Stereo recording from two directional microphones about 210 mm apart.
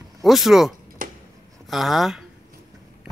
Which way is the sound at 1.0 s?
40° right (ahead or behind).